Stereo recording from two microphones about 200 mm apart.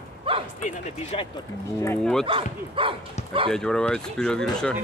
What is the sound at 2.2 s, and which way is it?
Speech, 25° right (ahead or behind).